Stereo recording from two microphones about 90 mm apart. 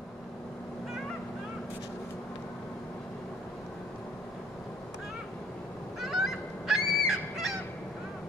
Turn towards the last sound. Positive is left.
turn(degrees=-5)  # may be behind; listen again after turning